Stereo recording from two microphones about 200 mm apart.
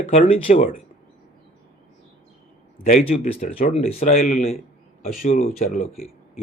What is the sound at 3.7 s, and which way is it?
Speech, 30° left (ahead or behind).